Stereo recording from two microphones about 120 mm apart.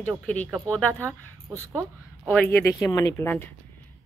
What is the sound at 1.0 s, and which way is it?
Speech, 25° right (ahead or behind).